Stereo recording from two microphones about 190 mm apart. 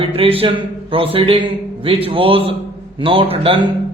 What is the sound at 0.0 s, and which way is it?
Speech, 30° right (ahead or behind).